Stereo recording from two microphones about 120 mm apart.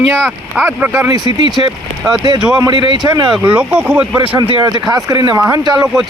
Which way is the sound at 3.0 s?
30° right (ahead or behind).